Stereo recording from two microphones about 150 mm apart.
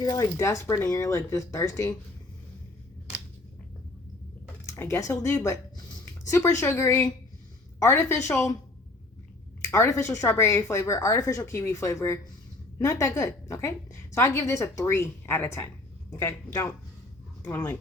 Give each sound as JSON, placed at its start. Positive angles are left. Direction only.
{"t": 0.0, "sound": "a woman's voice", "side_deg": 25}
{"t": 4.7, "sound": "a woman's voice", "side_deg": 20}
{"t": 9.6, "sound": "a woman's voice", "side_deg": 20}